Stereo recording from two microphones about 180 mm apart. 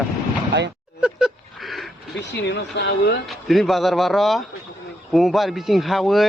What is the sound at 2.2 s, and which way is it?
Speech, 80° left.